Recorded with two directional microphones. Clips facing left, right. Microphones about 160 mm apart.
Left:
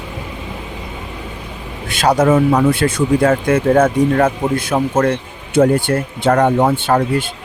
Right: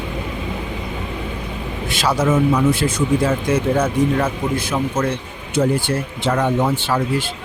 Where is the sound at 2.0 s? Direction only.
50° left (ahead or behind).